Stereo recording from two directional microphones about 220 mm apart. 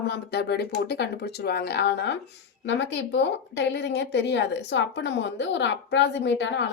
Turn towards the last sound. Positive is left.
turn(degrees=55)  # may be behind; listen again after turning